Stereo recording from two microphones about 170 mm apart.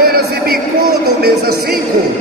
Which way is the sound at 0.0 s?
65° right (ahead or behind).